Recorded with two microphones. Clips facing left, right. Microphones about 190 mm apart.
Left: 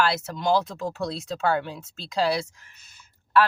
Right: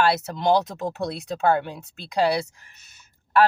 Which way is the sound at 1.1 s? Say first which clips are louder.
Right 5 dB; 55° right (ahead or behind).